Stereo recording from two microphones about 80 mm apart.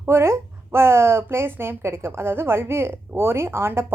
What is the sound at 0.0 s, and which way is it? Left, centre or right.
A woman's voice, right.